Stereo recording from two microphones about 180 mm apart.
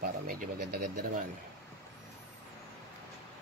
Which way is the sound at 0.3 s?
55° right (ahead or behind).